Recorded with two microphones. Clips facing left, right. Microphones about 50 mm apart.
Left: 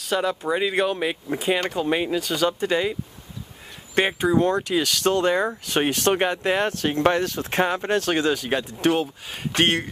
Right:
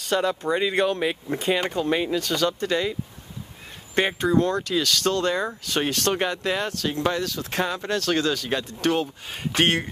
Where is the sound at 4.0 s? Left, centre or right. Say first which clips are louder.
Left 1 dB; centre.